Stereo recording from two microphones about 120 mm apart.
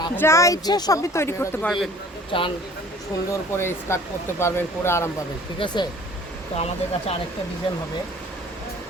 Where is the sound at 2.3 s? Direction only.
50° left (ahead or behind).